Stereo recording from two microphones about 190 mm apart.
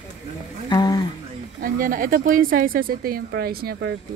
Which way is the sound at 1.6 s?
45° right (ahead or behind).